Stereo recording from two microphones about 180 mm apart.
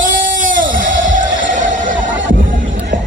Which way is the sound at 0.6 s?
90° right.